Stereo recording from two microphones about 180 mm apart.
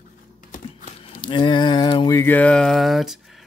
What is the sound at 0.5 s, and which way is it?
Speech, 30° left (ahead or behind).